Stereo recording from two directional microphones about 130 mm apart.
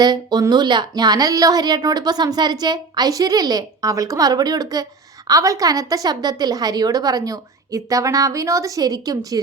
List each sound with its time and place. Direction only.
0.0 s a woman's voice: 30° right (ahead or behind)